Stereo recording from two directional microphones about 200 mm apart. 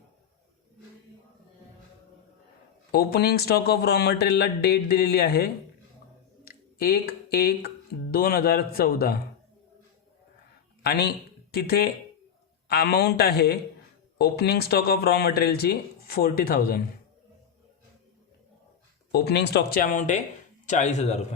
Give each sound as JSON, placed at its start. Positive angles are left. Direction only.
{"t": 2.9, "sound": "speech", "side_deg": 50}
{"t": 6.4, "sound": "clicking", "side_deg": 50}
{"t": 8.1, "sound": "speech", "side_deg": 50}
{"t": 10.8, "sound": "speech", "side_deg": 55}
{"t": 19.1, "sound": "a man's voice", "side_deg": 55}